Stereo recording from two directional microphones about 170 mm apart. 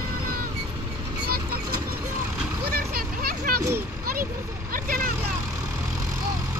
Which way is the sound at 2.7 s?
65° right (ahead or behind).